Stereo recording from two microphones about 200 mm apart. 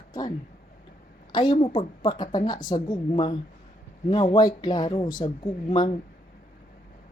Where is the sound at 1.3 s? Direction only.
25° left (ahead or behind).